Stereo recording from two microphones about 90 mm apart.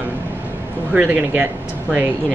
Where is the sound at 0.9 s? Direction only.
20° right (ahead or behind).